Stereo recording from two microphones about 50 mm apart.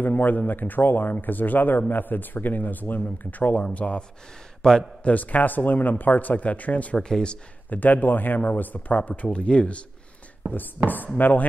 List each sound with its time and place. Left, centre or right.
0.0 s a man's voice: left; by 4.8 s centre
5.0 s speech: left
7.0 s speech: centre
7.7 s speech: left
10.8 s speech: right
11.1 s speech: left